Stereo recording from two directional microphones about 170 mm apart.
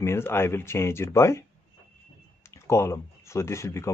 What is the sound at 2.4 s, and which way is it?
Speech, 15° left (ahead or behind).